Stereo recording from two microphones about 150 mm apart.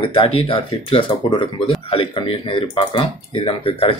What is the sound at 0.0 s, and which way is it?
Speech, 35° left (ahead or behind).